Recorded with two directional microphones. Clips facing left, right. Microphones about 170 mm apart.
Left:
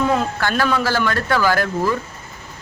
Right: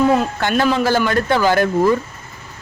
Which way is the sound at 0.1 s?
20° right (ahead or behind).